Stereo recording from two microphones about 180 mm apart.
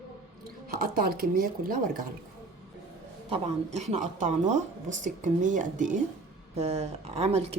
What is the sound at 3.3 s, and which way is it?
Speech, 35° right (ahead or behind).